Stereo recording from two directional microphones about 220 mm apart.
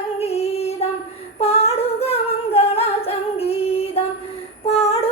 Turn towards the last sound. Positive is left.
turn(degrees=25)  # may be behind; listen again after turning